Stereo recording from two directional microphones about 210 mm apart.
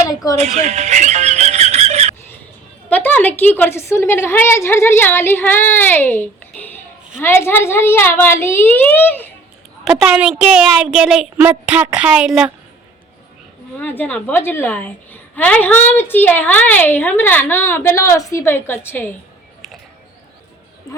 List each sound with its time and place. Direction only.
0.3 s music: 30° right (ahead or behind)
2.9 s a woman's voice: 10° left (ahead or behind)
9.8 s a child's voice: 5° right (ahead or behind)
13.7 s a woman's voice: 10° left (ahead or behind)